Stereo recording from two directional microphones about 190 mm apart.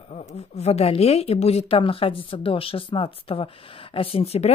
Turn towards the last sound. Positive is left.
turn(degrees=30)  # may be behind; listen again after turning